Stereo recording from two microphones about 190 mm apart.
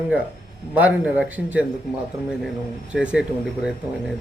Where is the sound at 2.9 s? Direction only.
5° right (ahead or behind).